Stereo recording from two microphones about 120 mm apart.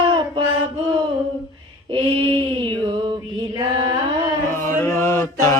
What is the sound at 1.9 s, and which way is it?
Female singing, 45° right (ahead or behind).